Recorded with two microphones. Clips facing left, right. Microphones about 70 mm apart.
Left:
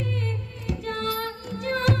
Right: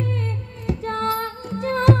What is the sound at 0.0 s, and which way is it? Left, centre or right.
Music, right.